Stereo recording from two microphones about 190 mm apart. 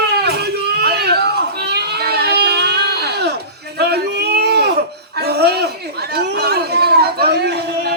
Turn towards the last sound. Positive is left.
turn(degrees=-60)  # may be behind; listen again after turning